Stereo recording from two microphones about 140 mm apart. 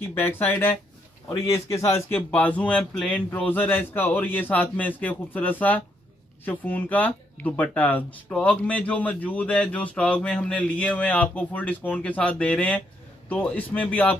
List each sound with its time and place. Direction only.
0.1 s speech: 15° left (ahead or behind)